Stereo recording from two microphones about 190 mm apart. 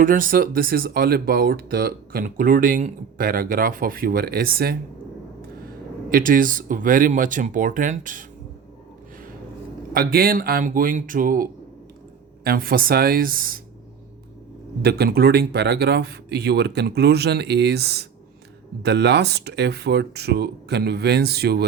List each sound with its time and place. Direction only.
0.0 s speech: 45° right (ahead or behind)
9.9 s speech: 50° right (ahead or behind)
12.5 s speech: 50° right (ahead or behind)
14.8 s speech: 55° right (ahead or behind)